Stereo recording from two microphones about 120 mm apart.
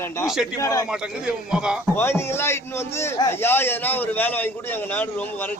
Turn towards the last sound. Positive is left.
turn(degrees=15)  # may be behind; listen again after turning